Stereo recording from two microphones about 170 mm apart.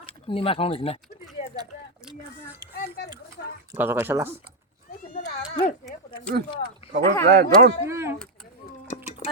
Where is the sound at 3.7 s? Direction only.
10° right (ahead or behind).